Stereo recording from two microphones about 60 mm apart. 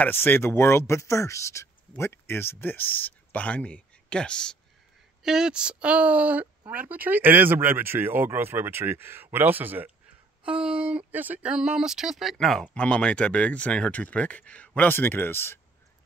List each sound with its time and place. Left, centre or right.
0.0 s speech: left; by 4.6 s centre
5.2 s speech: centre; by 9.9 s right
10.4 s speech: centre
11.1 s speech: right
11.4 s speech: centre
12.7 s speech: centre; by 15.6 s left